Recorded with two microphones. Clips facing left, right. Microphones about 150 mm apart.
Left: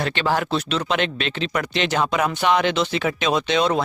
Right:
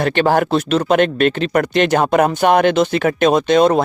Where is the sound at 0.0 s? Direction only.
50° right (ahead or behind).